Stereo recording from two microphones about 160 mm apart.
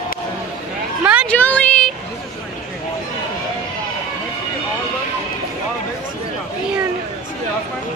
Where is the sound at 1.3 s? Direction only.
10° left (ahead or behind).